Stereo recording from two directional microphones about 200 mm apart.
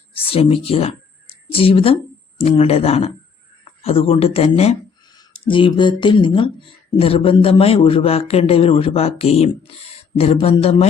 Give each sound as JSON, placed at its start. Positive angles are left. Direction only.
{"t": 0.1, "sound": "speech", "side_deg": 30}